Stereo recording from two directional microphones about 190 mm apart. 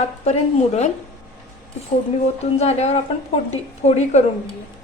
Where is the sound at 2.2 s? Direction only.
35° left (ahead or behind).